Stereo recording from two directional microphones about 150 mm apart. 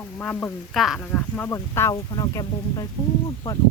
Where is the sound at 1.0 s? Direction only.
10° left (ahead or behind).